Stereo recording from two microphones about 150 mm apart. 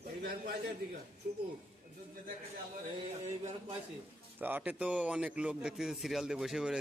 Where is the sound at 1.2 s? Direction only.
90° right.